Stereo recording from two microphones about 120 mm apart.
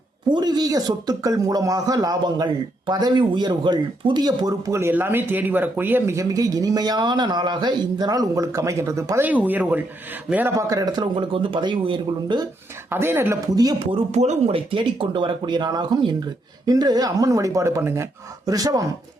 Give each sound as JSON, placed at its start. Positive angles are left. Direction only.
{"t": 0.3, "sound": "speech", "side_deg": -35}
{"t": 6.1, "sound": "speech", "side_deg": -30}
{"t": 9.2, "sound": "speech", "side_deg": -15}
{"t": 10.6, "sound": "speech", "side_deg": -30}
{"t": 12.9, "sound": "speech", "side_deg": -20}
{"t": 13.6, "sound": "speech", "side_deg": -35}
{"t": 14.1, "sound": "speech", "side_deg": -70}